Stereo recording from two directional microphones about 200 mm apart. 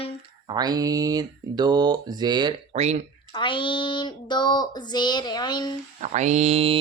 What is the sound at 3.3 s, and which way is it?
Child singing, 25° left (ahead or behind).